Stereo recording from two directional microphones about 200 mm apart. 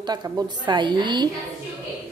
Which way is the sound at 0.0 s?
20° right (ahead or behind).